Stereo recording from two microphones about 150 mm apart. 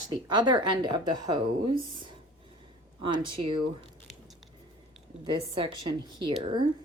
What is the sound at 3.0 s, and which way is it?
Speech, 35° right (ahead or behind).